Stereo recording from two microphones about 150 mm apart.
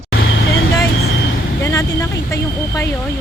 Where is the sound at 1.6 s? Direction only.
20° left (ahead or behind).